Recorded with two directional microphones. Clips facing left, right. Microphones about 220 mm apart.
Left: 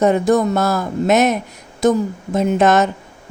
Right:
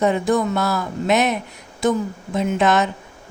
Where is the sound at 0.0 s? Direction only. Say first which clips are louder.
Left 4 dB; 45° left (ahead or behind).